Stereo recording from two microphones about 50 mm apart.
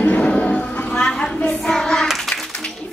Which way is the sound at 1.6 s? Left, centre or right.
Centre.